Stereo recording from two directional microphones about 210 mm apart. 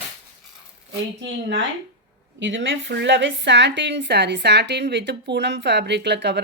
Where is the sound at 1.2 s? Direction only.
60° right (ahead or behind).